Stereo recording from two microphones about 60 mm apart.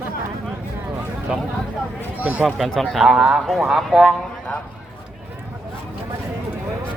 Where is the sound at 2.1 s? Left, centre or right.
Right.